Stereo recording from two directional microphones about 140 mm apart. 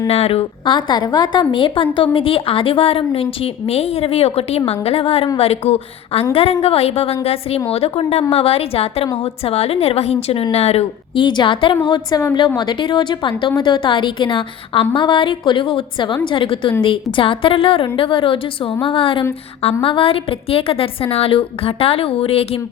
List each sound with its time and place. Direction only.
0.1 s a woman's voice: 45° left (ahead or behind)